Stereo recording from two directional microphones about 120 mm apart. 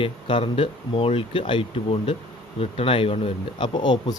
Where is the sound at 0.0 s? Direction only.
45° left (ahead or behind).